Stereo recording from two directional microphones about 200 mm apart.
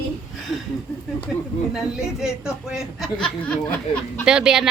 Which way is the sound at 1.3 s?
Centre (ahead or behind).